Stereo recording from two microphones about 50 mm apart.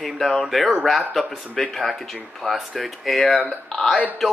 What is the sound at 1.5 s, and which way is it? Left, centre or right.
Speech, centre.